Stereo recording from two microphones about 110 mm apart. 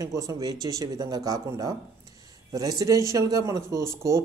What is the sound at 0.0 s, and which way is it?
A man's voice, 30° right (ahead or behind).